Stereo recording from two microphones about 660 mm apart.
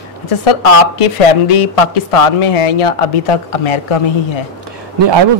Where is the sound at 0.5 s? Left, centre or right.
Left.